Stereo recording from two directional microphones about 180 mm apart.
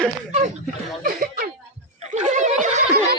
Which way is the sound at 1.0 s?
50° right (ahead or behind).